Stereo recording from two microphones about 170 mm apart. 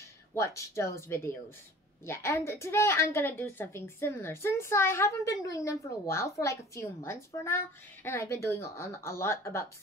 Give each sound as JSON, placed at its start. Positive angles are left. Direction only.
{"t": 0.3, "sound": "a woman's voice", "side_deg": 15}